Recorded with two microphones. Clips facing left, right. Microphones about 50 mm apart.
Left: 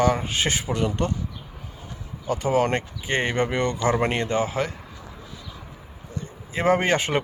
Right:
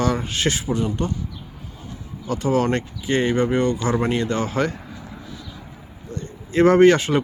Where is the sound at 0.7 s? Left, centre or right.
Left.